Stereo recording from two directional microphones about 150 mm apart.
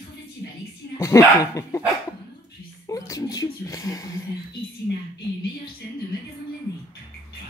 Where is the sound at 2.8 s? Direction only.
20° left (ahead or behind).